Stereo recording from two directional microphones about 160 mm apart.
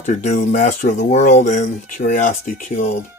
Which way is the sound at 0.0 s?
50° left (ahead or behind).